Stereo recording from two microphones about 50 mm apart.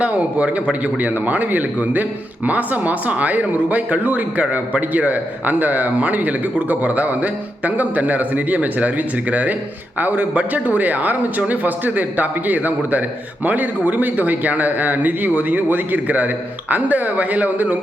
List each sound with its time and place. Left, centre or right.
0.0 s a man's voice: right